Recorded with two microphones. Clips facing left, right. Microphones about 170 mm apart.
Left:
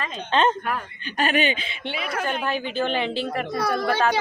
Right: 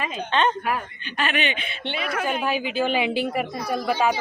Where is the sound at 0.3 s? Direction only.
40° left (ahead or behind).